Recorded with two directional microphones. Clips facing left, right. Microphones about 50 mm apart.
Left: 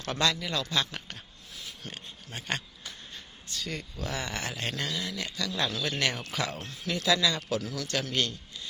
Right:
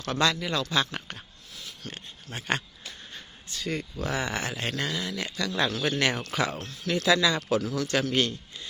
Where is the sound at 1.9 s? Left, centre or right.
Centre.